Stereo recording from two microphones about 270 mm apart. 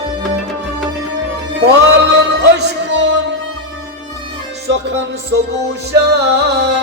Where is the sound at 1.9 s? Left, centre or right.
Right.